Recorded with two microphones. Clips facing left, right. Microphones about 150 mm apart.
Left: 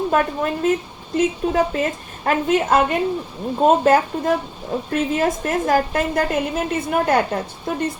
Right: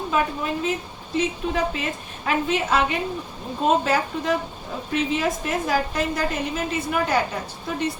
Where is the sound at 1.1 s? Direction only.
45° left (ahead or behind).